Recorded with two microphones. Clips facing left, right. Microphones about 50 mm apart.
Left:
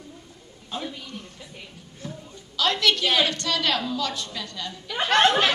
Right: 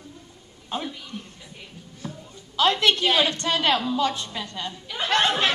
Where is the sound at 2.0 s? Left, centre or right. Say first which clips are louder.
Even; right.